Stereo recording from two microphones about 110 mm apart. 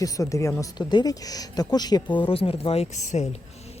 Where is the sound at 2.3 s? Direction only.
60° left (ahead or behind); by 3.3 s 90° left.